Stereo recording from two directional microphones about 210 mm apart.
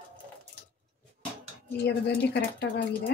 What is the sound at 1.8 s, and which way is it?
Speech, 55° left (ahead or behind).